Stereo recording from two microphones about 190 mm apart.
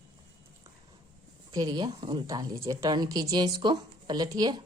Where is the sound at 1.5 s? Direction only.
20° right (ahead or behind).